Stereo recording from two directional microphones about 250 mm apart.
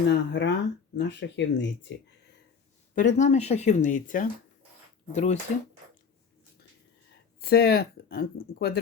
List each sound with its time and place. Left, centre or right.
0.1 s speech: left
2.9 s speech: left
7.4 s speech: left